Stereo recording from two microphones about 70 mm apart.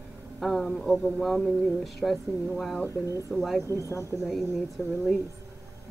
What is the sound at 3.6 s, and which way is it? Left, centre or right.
Speech, right.